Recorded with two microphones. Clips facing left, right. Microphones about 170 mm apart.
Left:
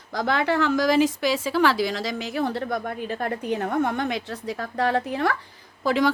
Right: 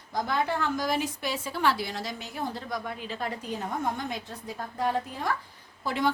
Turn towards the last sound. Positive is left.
turn(degrees=90)